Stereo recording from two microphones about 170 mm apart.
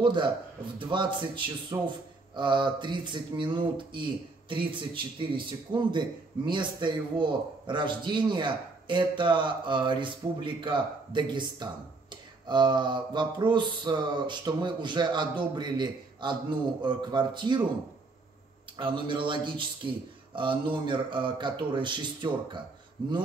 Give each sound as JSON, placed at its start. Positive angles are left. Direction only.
{"t": 0.0, "sound": "speech", "side_deg": -30}
{"t": 18.8, "sound": "speech", "side_deg": -30}